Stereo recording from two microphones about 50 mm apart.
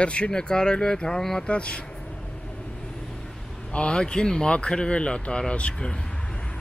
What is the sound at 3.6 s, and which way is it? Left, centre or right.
A man's voice, left.